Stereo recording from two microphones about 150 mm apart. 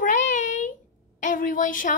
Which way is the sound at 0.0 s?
55° left (ahead or behind).